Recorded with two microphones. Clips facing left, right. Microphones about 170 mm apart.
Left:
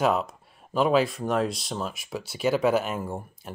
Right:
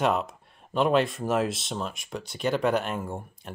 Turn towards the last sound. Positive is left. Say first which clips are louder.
# left 1 dB
turn(degrees=5)  # may be behind; listen again after turning